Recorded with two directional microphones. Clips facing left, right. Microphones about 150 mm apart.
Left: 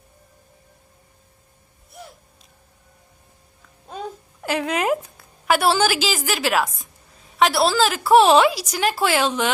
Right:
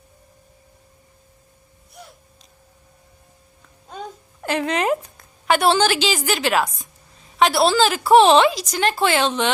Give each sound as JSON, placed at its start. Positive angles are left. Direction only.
{"t": 4.4, "sound": "a woman's voice", "side_deg": 5}